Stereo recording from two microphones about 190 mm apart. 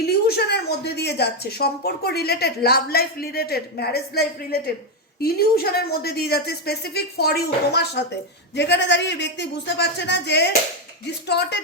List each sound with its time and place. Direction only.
0.3 s speech: 60° left (ahead or behind)